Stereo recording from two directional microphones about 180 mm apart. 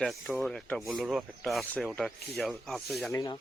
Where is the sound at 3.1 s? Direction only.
20° left (ahead or behind).